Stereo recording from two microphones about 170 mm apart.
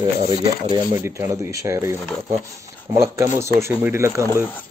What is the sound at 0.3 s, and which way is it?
Speech, 25° right (ahead or behind).